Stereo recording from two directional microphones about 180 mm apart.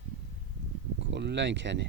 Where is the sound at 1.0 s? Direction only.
80° right.